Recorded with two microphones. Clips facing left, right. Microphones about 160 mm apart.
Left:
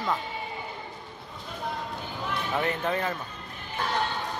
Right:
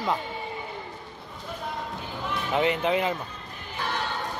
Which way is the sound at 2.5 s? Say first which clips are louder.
Right 5 dB; 15° right (ahead or behind).